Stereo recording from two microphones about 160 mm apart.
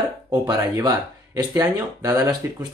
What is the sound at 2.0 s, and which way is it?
Speech, 25° right (ahead or behind).